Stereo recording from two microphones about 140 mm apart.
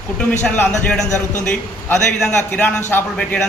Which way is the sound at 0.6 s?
5° left (ahead or behind).